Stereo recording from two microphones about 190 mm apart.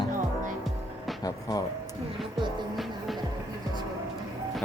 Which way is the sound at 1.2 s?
20° left (ahead or behind).